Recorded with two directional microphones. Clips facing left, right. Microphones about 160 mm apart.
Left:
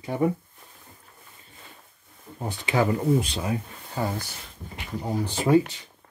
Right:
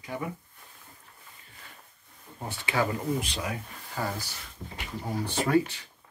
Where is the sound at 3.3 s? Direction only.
30° left (ahead or behind).